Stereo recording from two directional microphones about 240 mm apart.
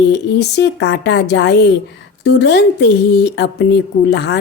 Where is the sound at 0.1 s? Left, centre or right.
Left.